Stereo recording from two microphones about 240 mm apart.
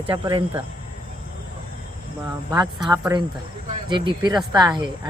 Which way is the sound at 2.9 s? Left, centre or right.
Centre.